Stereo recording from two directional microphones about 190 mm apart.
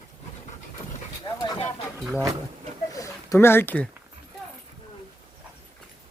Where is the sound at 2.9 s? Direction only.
15° left (ahead or behind).